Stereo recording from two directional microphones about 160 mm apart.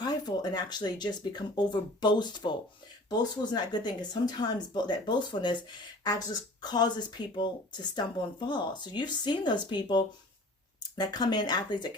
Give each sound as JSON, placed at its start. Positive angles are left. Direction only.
{"t": 0.0, "sound": "speech", "side_deg": 25}